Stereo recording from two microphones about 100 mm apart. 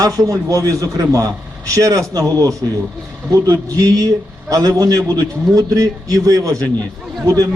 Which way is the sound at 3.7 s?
40° right (ahead or behind).